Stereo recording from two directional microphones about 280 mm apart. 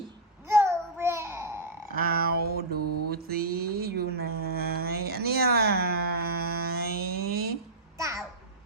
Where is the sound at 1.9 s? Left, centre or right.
Right.